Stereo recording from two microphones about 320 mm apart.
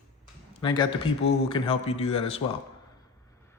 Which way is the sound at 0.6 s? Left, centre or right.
Centre.